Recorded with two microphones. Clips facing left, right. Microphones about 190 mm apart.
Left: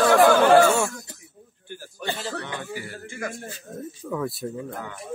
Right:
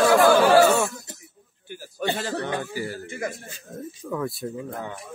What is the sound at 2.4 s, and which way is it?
Speech, 40° right (ahead or behind).